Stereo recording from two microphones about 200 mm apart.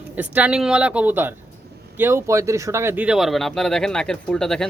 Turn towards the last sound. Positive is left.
turn(degrees=5)  # may be behind; listen again after turning